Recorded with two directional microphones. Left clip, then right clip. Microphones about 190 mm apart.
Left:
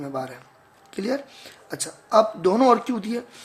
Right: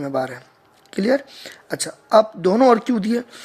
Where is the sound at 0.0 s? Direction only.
35° right (ahead or behind).